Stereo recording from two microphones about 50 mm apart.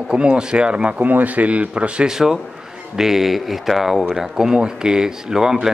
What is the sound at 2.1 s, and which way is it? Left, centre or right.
Speech, centre.